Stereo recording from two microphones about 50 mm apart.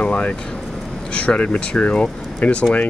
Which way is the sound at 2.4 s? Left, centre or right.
Left.